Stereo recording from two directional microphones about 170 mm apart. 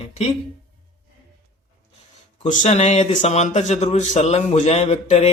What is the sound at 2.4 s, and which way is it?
Speech, 45° left (ahead or behind).